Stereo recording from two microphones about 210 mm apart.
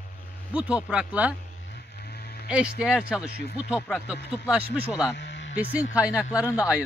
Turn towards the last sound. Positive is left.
turn(degrees=-5)  # may be behind; listen again after turning